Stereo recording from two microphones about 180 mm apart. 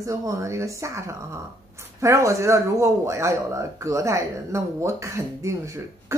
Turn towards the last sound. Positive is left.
turn(degrees=-15)  # may be behind; listen again after turning